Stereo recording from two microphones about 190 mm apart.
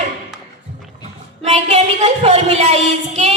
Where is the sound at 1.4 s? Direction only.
35° right (ahead or behind).